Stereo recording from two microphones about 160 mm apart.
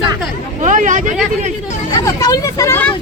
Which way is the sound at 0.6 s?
50° right (ahead or behind).